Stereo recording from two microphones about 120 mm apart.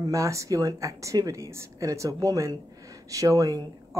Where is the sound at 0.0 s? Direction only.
25° right (ahead or behind).